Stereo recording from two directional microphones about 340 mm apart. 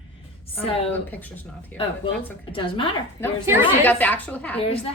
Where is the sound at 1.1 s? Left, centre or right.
Centre.